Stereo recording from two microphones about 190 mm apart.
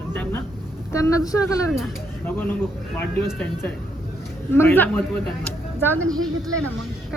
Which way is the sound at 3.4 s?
10° left (ahead or behind).